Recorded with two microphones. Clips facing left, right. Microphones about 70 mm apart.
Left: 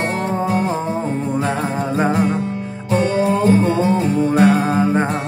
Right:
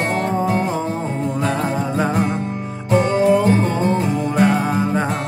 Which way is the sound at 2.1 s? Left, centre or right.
Centre.